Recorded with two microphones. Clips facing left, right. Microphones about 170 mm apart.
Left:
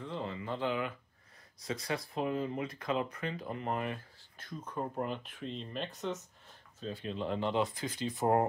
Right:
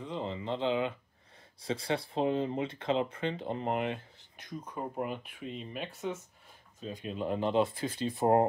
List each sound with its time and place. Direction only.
0.0 s speech: 20° right (ahead or behind)